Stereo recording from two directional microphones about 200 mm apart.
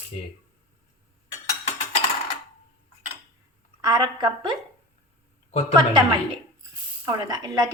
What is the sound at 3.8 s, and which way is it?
Speech, 20° right (ahead or behind).